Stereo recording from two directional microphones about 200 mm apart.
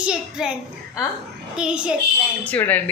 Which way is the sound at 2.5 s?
10° left (ahead or behind).